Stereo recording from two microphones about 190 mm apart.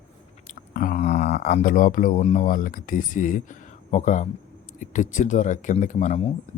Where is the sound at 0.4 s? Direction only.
45° left (ahead or behind).